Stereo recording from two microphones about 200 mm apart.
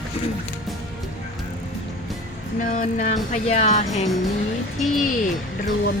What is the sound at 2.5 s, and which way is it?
Speech, 40° left (ahead or behind).